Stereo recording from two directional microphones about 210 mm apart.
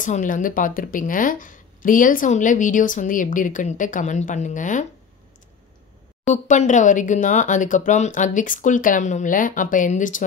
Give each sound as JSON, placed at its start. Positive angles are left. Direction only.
{"t": 0.0, "sound": "a woman's voice", "side_deg": 40}
{"t": 6.2, "sound": "a woman's voice", "side_deg": 35}